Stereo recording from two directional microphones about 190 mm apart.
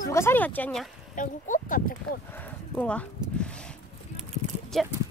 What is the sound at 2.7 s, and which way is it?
Speech, 5° left (ahead or behind).